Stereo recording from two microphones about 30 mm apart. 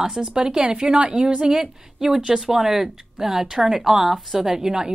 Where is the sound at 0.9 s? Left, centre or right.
Right.